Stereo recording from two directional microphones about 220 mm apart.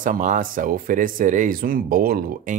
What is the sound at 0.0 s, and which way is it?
Speech, 35° right (ahead or behind).